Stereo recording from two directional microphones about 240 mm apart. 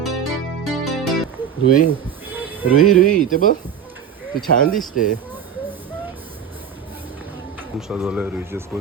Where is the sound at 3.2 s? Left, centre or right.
Left.